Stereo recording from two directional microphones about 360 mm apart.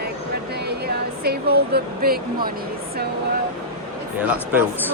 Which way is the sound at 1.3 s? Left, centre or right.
Right.